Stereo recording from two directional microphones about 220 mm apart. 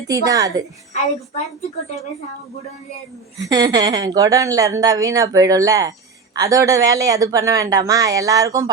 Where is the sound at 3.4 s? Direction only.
15° right (ahead or behind).